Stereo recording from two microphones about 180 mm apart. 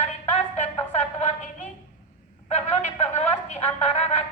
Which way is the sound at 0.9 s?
35° left (ahead or behind).